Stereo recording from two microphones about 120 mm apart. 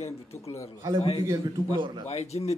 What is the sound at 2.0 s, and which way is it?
Speech, 60° left (ahead or behind).